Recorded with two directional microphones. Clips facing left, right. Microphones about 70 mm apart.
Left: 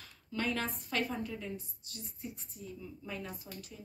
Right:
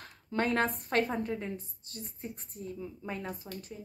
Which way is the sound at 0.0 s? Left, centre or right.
Right.